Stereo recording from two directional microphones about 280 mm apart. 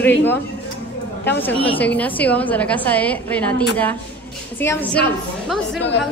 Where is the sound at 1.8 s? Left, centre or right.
Centre.